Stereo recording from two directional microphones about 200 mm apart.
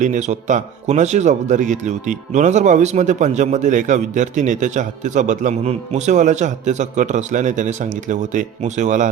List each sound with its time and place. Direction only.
0.0 s speech: 35° right (ahead or behind)